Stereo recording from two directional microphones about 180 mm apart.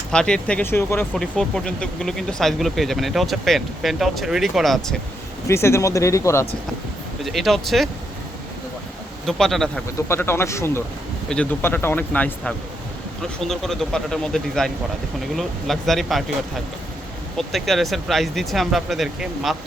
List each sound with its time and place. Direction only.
0.1 s speech: 5° left (ahead or behind)
1.1 s speech: centre (ahead or behind)
5.5 s speech: 15° left (ahead or behind)
7.3 s speech: centre (ahead or behind)
9.2 s speech: centre (ahead or behind)
10.1 s speech: 15° left (ahead or behind)
17.3 s speech: centre (ahead or behind)